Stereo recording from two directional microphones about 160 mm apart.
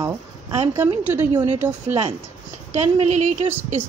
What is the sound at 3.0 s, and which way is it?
Speech, 45° right (ahead or behind).